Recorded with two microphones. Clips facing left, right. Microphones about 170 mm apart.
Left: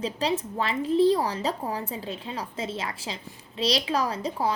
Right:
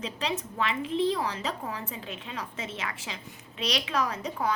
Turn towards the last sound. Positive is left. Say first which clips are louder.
# left 3 dB
turn(degrees=30)  # may be behind; listen again after turning